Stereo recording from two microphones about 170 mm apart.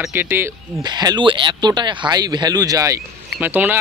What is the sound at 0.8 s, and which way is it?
Speech, 25° right (ahead or behind).